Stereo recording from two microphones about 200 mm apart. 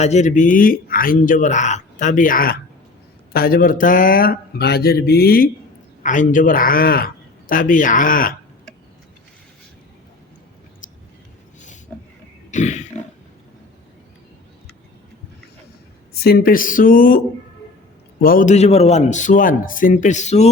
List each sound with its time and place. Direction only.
0.0 s a man's voice: 35° left (ahead or behind)
12.5 s a sound: 35° left (ahead or behind)
16.2 s a man's voice: 50° left (ahead or behind); by 20.5 s 35° left (ahead or behind)